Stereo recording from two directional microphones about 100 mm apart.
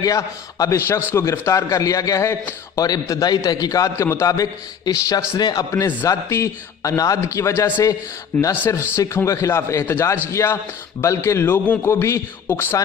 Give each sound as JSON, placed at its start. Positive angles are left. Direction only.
{"t": 0.0, "sound": "a man's voice", "side_deg": 35}
{"t": 6.0, "sound": "a man's voice", "side_deg": 30}
{"t": 7.8, "sound": "a man's voice", "side_deg": 35}
{"t": 11.9, "sound": "a man's voice", "side_deg": 30}